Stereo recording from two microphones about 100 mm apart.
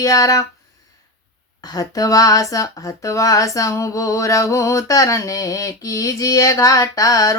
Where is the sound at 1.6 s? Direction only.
40° left (ahead or behind).